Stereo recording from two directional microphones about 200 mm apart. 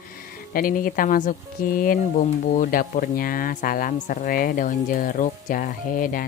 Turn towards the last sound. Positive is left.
turn(degrees=40)  # may be behind; listen again after turning